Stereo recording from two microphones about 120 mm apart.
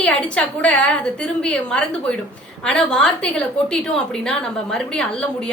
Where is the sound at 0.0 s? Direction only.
10° left (ahead or behind).